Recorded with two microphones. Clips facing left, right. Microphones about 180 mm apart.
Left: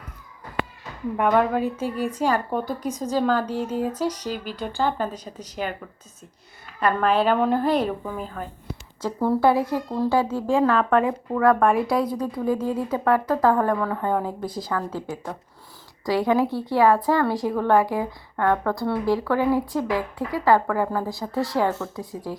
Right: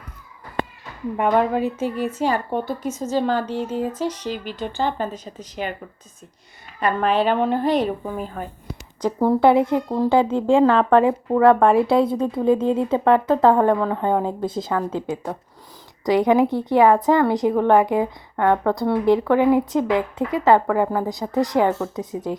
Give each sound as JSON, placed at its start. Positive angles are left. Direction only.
{"t": 1.2, "sound": "a woman's voice", "side_deg": -15}
{"t": 1.7, "sound": "speech", "side_deg": 10}
{"t": 2.0, "sound": "a woman's voice", "side_deg": -10}
{"t": 2.5, "sound": "speech", "side_deg": 10}
{"t": 6.7, "sound": "a woman's voice", "side_deg": 0}